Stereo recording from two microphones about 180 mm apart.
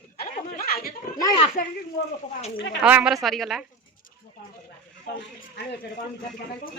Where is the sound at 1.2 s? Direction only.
20° left (ahead or behind).